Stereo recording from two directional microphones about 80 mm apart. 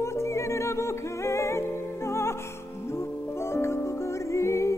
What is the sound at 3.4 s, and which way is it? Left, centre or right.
Music, left.